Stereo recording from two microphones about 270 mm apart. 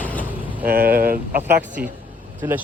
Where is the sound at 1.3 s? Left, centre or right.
Centre.